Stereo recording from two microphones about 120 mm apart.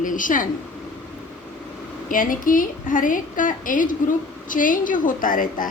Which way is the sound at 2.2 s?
90° left.